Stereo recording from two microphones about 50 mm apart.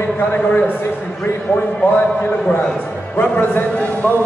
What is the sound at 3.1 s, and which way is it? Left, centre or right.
Speech, left.